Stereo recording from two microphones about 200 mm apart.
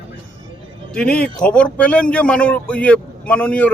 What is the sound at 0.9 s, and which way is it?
A man's voice, 5° left (ahead or behind).